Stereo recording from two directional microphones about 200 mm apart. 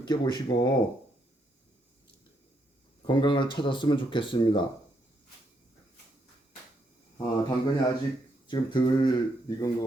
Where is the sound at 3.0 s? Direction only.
25° left (ahead or behind).